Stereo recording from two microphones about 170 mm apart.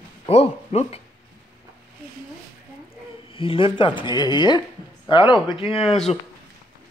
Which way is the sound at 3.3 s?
30° left (ahead or behind).